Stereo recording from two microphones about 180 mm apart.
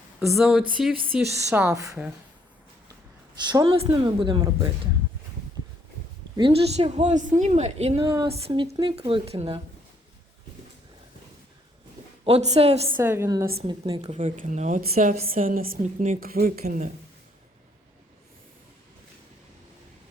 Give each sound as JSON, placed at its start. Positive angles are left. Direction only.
{"t": 0.3, "sound": "a woman's voice", "side_deg": -5}
{"t": 3.5, "sound": "a woman's voice", "side_deg": -25}
{"t": 6.3, "sound": "speech", "side_deg": -30}
{"t": 12.2, "sound": "speech", "side_deg": -35}
{"t": 13.0, "sound": "a woman's voice", "side_deg": -15}
{"t": 13.6, "sound": "a woman's voice", "side_deg": -30}
{"t": 14.0, "sound": "a woman's voice", "side_deg": -40}
{"t": 14.8, "sound": "a woman's voice", "side_deg": -55}